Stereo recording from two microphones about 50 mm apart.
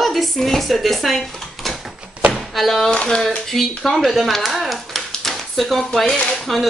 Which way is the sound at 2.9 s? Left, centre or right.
Centre.